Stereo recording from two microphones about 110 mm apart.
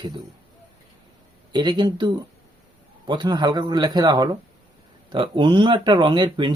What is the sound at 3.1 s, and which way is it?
Speech, 45° right (ahead or behind).